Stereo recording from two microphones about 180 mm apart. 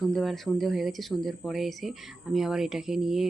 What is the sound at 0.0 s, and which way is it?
Speech, centre (ahead or behind).